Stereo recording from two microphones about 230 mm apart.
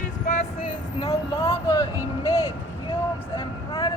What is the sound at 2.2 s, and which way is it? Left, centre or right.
Speech, left.